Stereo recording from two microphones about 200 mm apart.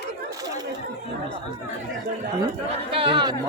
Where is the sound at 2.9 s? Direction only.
25° right (ahead or behind).